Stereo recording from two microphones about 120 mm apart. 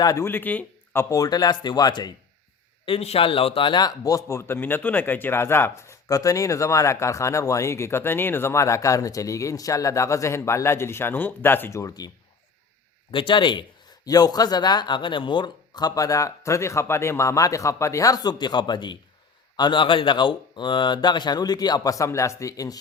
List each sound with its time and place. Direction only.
0.0 s a man's voice: 30° left (ahead or behind)
0.3 s speech: 15° left (ahead or behind)
1.1 s a man's voice: 30° left (ahead or behind)
2.8 s a man's voice: 55° left (ahead or behind); by 12.1 s 30° left (ahead or behind)
13.1 s a man's voice: 45° left (ahead or behind)